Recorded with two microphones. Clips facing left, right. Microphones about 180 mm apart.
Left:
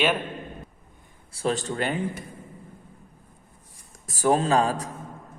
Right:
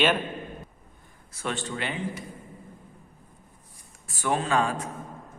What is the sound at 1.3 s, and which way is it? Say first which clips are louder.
Speech: left 5 dB; 35° left (ahead or behind).